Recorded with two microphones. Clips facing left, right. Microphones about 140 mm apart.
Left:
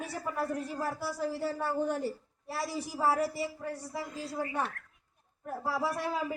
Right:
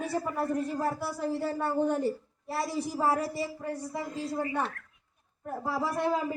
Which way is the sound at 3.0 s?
15° right (ahead or behind).